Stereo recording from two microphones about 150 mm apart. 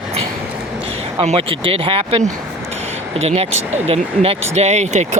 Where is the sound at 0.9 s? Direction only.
40° right (ahead or behind).